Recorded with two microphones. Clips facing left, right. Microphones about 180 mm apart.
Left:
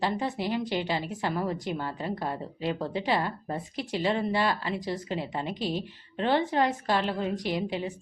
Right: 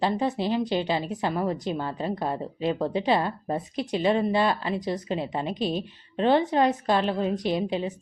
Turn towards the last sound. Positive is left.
turn(degrees=-20)  # may be behind; listen again after turning